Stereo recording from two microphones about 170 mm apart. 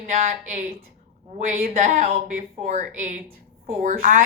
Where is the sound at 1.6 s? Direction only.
55° right (ahead or behind).